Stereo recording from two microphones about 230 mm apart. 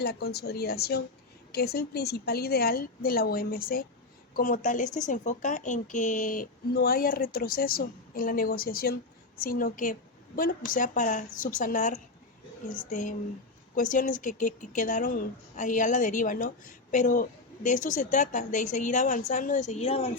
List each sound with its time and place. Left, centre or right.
0.0 s a woman's voice: left